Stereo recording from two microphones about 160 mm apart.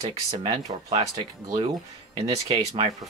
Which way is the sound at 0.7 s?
35° right (ahead or behind).